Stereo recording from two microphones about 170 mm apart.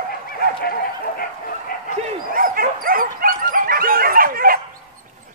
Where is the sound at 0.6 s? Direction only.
60° left (ahead or behind).